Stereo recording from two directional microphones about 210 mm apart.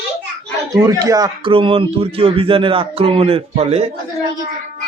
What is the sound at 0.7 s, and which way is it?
A man's voice, 15° right (ahead or behind).